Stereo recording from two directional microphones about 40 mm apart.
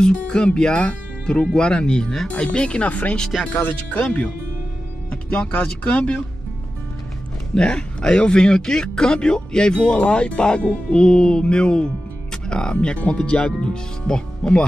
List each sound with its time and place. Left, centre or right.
0.6 s speech: left
2.8 s speech: left
7.5 s speech: left
9.9 s speech: left
12.7 s speech: left